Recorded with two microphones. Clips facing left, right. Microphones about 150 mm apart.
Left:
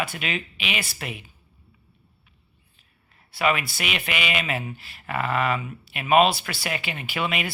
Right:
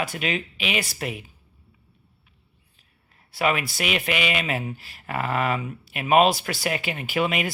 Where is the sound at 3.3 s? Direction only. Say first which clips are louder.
Even; 40° right (ahead or behind).